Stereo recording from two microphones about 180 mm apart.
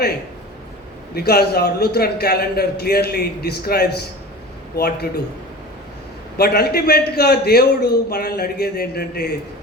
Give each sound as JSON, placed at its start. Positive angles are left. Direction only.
{"t": 1.1, "sound": "a man's voice", "side_deg": 60}
{"t": 6.3, "sound": "a man's voice", "side_deg": 60}